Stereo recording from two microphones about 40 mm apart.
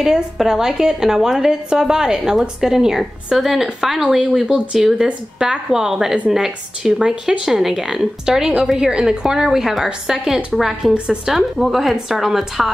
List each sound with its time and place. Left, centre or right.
0.0 s speech: centre
7.2 s speech: centre